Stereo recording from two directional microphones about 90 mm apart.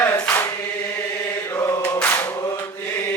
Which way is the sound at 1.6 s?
35° left (ahead or behind).